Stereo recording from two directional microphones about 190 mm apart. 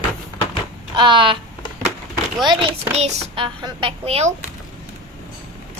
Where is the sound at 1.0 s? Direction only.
25° right (ahead or behind).